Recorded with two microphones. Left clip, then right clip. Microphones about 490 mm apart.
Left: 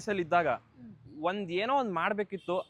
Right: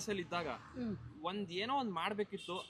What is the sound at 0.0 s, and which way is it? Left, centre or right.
Speech, left.